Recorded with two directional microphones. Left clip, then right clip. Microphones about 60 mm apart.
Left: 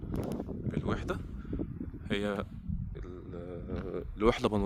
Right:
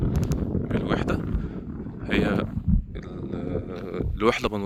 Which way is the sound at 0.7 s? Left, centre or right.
Right.